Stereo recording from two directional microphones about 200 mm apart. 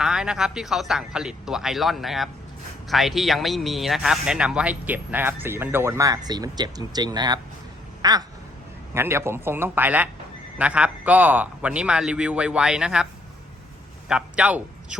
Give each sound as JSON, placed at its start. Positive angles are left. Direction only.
{"t": 0.0, "sound": "a man's voice", "side_deg": -5}
{"t": 8.0, "sound": "quack", "side_deg": -20}
{"t": 8.9, "sound": "a man's voice", "side_deg": -10}
{"t": 14.1, "sound": "a man's voice", "side_deg": -5}